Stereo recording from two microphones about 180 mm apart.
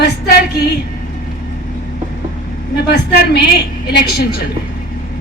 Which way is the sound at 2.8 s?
65° left (ahead or behind).